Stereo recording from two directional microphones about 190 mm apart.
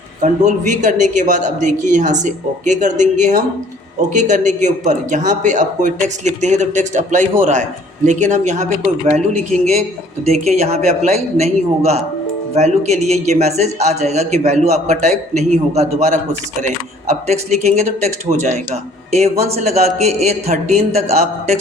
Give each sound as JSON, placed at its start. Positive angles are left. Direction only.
{"t": 0.2, "sound": "speech", "side_deg": -40}